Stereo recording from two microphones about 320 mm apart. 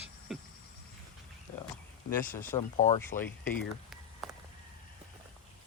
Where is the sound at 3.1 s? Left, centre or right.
Left.